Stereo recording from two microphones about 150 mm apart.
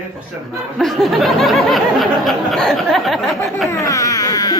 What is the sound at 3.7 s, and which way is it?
Baby cry, 20° left (ahead or behind).